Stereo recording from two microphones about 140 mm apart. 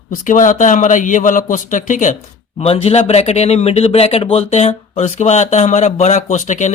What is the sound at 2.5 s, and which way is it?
Speech, 50° left (ahead or behind).